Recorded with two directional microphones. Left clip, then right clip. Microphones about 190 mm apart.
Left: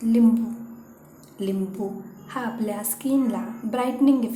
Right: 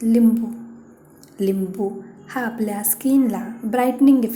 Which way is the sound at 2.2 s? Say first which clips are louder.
Right 4 dB; 20° right (ahead or behind).